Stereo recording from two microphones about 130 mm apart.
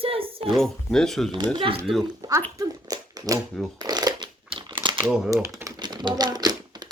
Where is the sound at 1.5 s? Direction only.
40° right (ahead or behind).